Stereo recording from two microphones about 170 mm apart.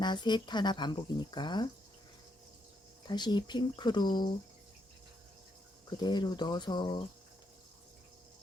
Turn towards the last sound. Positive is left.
turn(degrees=30)  # may be behind; listen again after turning